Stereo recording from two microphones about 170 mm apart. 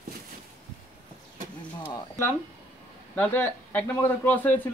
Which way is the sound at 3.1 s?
10° left (ahead or behind).